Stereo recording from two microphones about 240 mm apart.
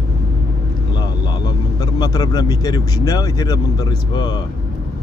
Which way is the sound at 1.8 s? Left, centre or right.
Centre.